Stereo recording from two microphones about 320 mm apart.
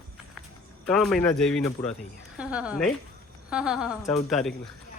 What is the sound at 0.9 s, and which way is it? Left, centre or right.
Speech, centre.